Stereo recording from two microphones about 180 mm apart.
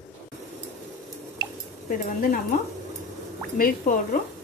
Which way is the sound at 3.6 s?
50° left (ahead or behind).